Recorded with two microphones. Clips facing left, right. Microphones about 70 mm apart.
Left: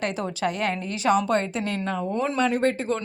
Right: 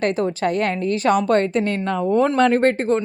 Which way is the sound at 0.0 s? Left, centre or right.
Right.